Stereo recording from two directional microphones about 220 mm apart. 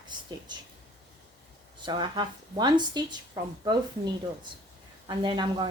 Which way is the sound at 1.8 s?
20° right (ahead or behind).